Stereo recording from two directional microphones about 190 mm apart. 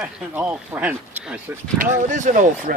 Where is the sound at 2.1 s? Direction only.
40° right (ahead or behind).